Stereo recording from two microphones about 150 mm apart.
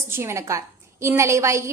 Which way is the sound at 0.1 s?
15° right (ahead or behind).